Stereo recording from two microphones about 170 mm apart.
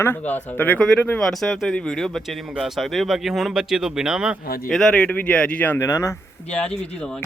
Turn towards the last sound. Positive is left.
turn(degrees=5)  # may be behind; listen again after turning